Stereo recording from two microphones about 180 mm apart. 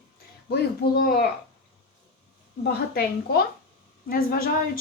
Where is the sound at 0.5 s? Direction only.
60° left (ahead or behind).